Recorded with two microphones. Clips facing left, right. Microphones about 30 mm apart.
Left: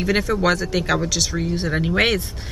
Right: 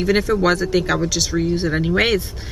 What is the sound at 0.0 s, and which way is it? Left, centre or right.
Speech, centre.